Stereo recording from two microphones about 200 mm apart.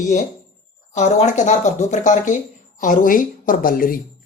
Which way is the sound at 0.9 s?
35° left (ahead or behind).